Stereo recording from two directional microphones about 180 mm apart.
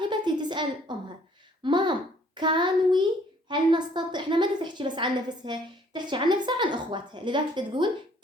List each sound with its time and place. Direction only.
0.1 s a sound: 25° right (ahead or behind)
1.6 s child singing: 25° right (ahead or behind)
3.5 s a woman's voice: 25° right (ahead or behind)